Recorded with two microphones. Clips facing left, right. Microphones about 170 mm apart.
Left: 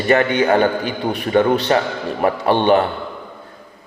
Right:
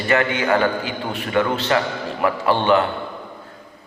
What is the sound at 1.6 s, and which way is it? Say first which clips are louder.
Speech: left 3 dB; 35° left (ahead or behind).